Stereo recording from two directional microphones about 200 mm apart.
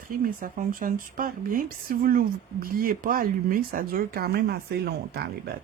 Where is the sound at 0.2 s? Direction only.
45° right (ahead or behind).